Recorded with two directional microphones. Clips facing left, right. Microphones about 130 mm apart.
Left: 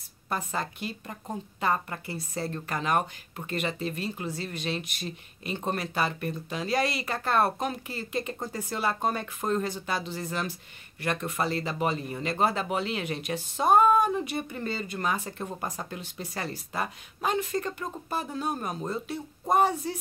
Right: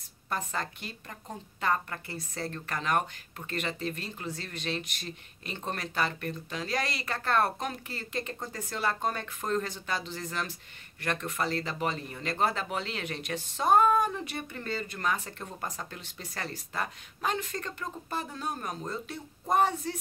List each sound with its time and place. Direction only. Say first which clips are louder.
0.3 s speech: left 2 dB; 10° left (ahead or behind)